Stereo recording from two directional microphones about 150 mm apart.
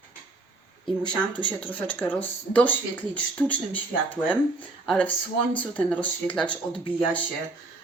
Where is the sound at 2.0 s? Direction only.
10° left (ahead or behind).